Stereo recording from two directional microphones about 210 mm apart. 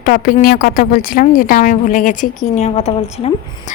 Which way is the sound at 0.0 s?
45° left (ahead or behind).